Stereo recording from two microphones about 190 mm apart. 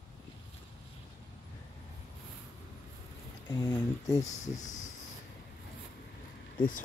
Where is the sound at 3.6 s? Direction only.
15° left (ahead or behind).